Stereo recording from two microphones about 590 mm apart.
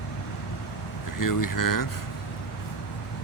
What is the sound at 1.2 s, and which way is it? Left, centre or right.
Speech, left.